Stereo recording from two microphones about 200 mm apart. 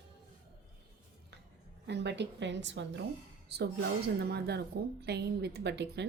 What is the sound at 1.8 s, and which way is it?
A woman's voice, 60° right (ahead or behind).